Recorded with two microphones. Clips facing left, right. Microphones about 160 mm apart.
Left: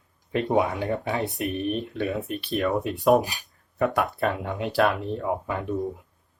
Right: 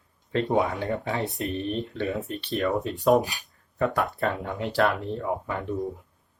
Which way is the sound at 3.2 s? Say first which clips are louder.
Left 1 dB; 20° left (ahead or behind).